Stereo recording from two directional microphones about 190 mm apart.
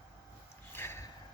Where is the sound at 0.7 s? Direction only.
10° left (ahead or behind).